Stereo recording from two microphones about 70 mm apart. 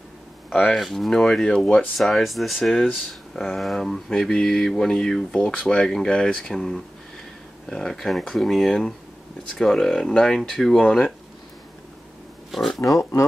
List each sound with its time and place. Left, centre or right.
0.5 s speech: centre
2.0 s mantra: centre
5.3 s speech: centre
7.7 s mantra: centre
12.4 s a sound: centre
12.8 s speech: left